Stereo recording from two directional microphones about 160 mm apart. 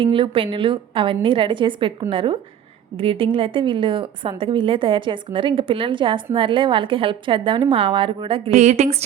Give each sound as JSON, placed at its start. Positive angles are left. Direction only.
{"t": 0.0, "sound": "a woman's voice", "side_deg": -35}
{"t": 8.5, "sound": "a woman's voice", "side_deg": -45}